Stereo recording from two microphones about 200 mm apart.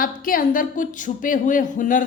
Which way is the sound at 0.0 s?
45° left (ahead or behind).